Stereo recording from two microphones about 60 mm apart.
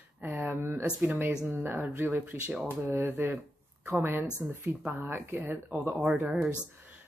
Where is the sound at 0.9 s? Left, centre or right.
Right.